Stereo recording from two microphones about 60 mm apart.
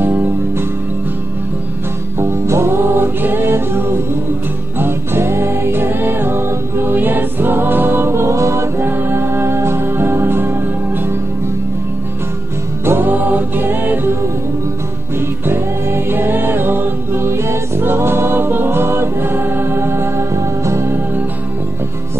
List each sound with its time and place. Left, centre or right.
0.0 s music: right
2.1 s music: right
8.8 s music: right
12.8 s music: right
15.1 s music: right